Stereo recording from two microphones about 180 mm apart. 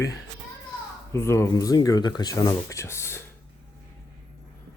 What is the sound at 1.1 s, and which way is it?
Speech, 15° left (ahead or behind).